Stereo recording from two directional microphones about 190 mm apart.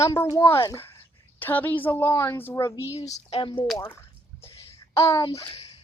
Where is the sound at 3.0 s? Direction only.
35° left (ahead or behind).